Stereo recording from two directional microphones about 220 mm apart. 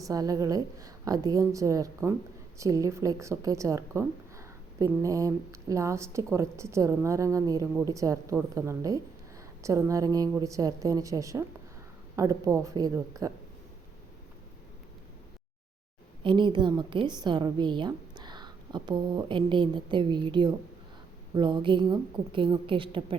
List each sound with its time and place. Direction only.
0.0 s a woman's voice: 15° right (ahead or behind)
16.2 s a woman's voice: 20° right (ahead or behind)